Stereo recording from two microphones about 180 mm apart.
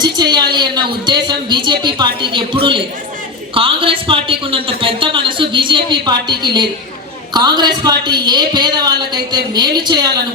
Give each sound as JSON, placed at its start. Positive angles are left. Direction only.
{"t": 0.0, "sound": "a woman's voice", "side_deg": -25}